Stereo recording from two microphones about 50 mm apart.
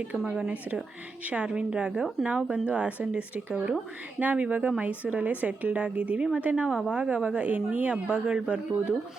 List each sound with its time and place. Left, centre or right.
0.3 s a woman's voice: centre
6.7 s speech: centre
6.9 s a woman's voice: right